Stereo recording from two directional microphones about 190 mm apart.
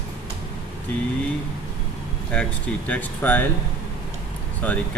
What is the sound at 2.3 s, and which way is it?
Speech, 5° left (ahead or behind).